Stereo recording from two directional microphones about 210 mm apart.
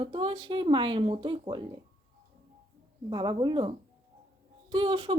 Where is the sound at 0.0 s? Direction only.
25° right (ahead or behind).